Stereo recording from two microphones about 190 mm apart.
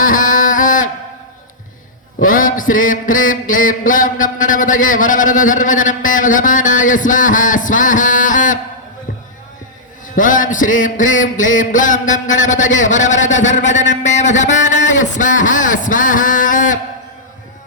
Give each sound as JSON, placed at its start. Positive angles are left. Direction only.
{"t": 0.0, "sound": "a sound", "side_deg": 45}
{"t": 2.1, "sound": "music", "side_deg": 45}
{"t": 10.2, "sound": "music", "side_deg": 45}